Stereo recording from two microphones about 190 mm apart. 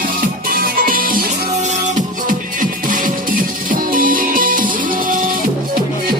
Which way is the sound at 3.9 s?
45° right (ahead or behind).